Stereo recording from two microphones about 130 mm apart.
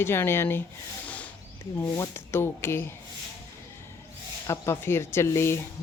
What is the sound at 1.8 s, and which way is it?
Speech, 25° left (ahead or behind).